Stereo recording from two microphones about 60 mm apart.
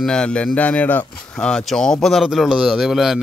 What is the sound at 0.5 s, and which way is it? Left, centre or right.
Speech, left.